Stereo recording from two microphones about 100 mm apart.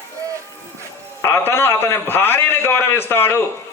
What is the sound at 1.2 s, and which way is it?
A man's voice, 25° left (ahead or behind).